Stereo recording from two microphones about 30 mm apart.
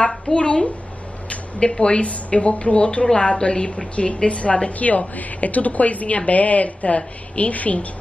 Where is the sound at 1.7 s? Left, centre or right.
Left.